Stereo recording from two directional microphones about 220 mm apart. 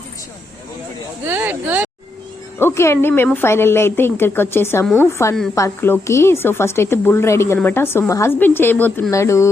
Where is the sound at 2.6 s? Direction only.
10° left (ahead or behind).